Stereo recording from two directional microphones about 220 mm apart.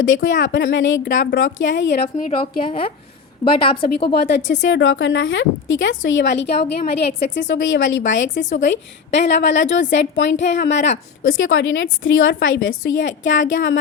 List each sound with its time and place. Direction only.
0.4 s a woman's voice: 55° left (ahead or behind)
2.6 s a woman's voice: 25° left (ahead or behind)
3.8 s a woman's voice: 45° left (ahead or behind)